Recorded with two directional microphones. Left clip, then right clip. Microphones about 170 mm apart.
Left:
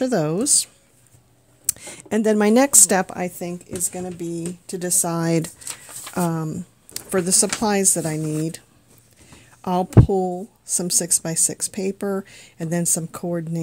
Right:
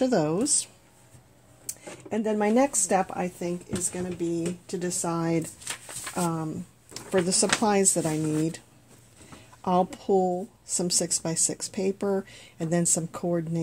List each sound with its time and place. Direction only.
0.0 s speech: 40° left (ahead or behind)
1.7 s a woman's voice: 60° left (ahead or behind)
6.9 s speech: 45° left (ahead or behind)
9.6 s speech: 40° left (ahead or behind)